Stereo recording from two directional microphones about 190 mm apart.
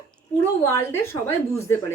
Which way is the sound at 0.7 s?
15° left (ahead or behind).